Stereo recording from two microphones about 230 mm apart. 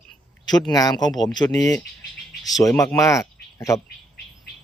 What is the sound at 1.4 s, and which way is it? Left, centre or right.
Speech, centre.